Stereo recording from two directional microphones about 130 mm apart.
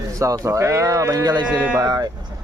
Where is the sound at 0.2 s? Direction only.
25° right (ahead or behind).